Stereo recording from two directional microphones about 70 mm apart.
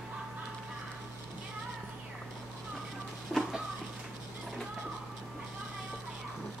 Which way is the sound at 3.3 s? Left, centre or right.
Centre.